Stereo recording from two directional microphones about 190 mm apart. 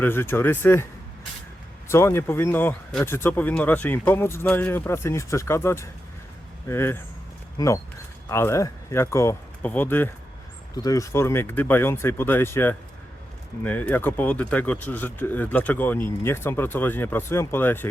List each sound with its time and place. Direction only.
0.0 s speech: 10° left (ahead or behind)
1.9 s speech: 15° left (ahead or behind)